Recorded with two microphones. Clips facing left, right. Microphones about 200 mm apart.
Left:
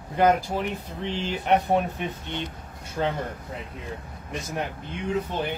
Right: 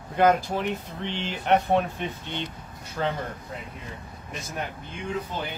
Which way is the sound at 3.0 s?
20° left (ahead or behind).